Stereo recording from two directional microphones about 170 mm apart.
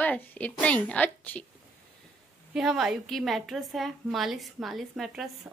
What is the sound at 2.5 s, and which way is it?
A woman's voice, centre (ahead or behind).